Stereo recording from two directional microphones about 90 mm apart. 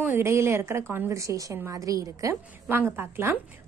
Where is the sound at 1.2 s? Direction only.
35° right (ahead or behind).